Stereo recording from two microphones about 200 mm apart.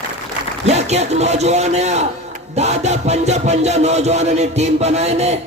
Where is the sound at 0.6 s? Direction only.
35° right (ahead or behind).